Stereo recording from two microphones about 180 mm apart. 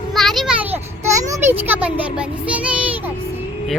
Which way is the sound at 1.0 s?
15° right (ahead or behind).